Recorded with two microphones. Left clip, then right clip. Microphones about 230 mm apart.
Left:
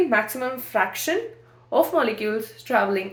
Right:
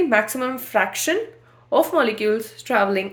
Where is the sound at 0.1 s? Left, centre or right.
Right.